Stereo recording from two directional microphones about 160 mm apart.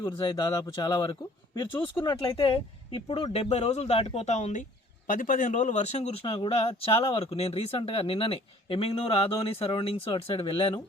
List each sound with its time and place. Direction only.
0.2 s speech: 25° left (ahead or behind); by 4.6 s 45° left (ahead or behind)
5.0 s speech: 55° left (ahead or behind); by 10.8 s 35° left (ahead or behind)